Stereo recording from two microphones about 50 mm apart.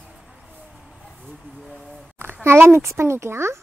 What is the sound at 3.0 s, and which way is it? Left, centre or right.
Speech, right.